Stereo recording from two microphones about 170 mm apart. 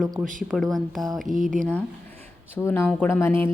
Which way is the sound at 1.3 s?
50° right (ahead or behind).